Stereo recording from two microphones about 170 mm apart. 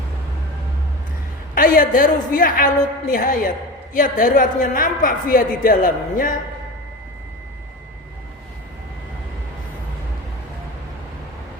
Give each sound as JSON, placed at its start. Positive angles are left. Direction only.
{"t": 1.5, "sound": "a woman's voice", "side_deg": 55}